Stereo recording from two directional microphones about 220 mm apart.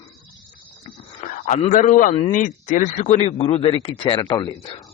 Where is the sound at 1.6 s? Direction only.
35° left (ahead or behind); by 4.5 s 20° left (ahead or behind).